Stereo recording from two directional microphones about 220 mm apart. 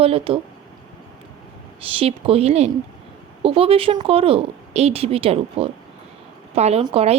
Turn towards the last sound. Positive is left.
turn(degrees=-25)  # may be behind; listen again after turning